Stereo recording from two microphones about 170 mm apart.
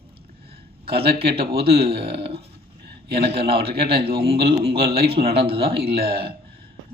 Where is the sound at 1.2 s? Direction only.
35° right (ahead or behind).